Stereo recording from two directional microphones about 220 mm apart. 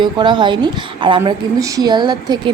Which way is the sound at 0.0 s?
20° right (ahead or behind).